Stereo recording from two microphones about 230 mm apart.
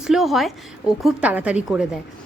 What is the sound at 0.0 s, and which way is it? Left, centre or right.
A woman's voice, centre.